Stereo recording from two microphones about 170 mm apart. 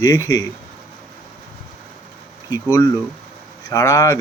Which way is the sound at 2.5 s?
20° left (ahead or behind).